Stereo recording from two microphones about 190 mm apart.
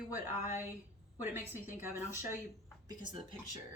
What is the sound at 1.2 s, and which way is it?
Speech, 10° right (ahead or behind).